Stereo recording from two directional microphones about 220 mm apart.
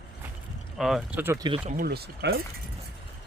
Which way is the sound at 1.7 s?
45° right (ahead or behind).